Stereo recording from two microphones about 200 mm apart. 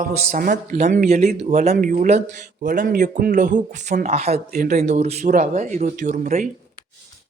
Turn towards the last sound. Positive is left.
turn(degrees=-40)  # may be behind; listen again after turning